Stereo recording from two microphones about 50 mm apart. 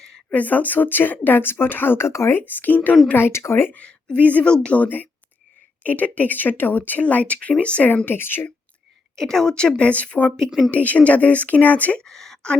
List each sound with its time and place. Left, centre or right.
0.3 s speech: left
2.0 s speech: left
2.5 s speech: left
3.2 s speech: left
3.8 s a woman's voice: left
4.8 s speech: left
8.0 s a woman's voice: left
9.1 s speech: centre; by 11.9 s left
11.9 s speech: centre